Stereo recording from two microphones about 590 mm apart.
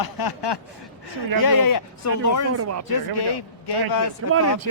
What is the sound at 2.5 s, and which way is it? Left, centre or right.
Speech, right.